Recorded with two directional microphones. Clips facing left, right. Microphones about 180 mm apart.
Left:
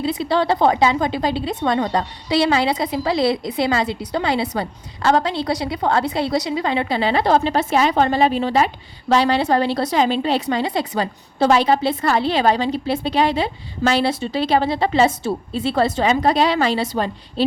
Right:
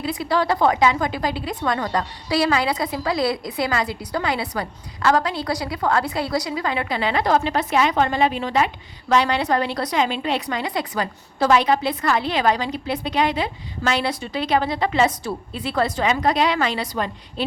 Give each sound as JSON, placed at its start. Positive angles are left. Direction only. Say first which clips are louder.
{"t": 0.0, "sound": "a woman's voice", "louder": "left 3 dB", "side_deg": 25}